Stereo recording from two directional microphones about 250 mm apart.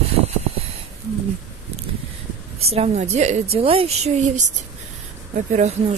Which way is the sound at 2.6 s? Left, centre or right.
Right.